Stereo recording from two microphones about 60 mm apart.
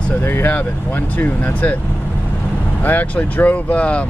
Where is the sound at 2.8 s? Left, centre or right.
Left.